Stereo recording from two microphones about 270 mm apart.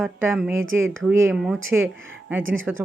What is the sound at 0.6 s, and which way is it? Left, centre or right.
Speech, right.